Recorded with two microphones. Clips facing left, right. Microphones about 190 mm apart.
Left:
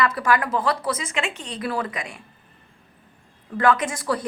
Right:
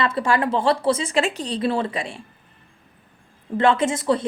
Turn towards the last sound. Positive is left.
turn(degrees=-25)  # may be behind; listen again after turning